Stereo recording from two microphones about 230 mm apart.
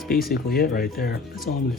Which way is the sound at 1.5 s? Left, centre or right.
Left.